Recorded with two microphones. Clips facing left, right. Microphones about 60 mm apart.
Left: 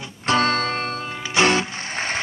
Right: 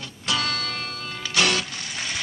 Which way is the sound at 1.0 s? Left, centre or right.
Left.